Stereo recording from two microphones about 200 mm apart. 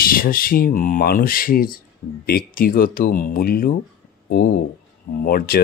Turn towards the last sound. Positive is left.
turn(degrees=50)  # may be behind; listen again after turning